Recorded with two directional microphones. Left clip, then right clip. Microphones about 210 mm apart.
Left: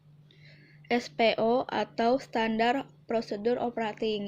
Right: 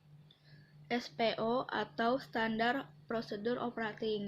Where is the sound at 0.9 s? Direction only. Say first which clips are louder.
Left 9 dB; 35° left (ahead or behind).